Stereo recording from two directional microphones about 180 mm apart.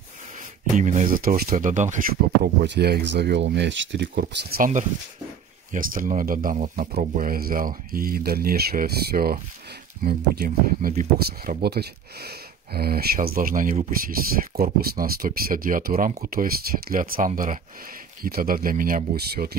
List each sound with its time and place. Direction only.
0.7 s speech: 45° right (ahead or behind)
1.1 s speech: 55° right (ahead or behind); by 4.1 s 80° right
4.1 s speech: 65° right (ahead or behind)
5.7 s speech: 50° right (ahead or behind)
11.1 s speech: 60° right (ahead or behind); by 13.9 s 40° right (ahead or behind)
14.0 s speech: 55° right (ahead or behind)